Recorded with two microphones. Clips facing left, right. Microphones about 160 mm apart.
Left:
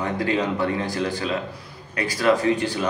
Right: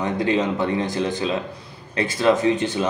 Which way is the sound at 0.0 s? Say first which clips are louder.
Right 2 dB; 20° right (ahead or behind).